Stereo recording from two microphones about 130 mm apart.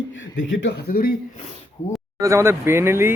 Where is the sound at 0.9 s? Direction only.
90° left.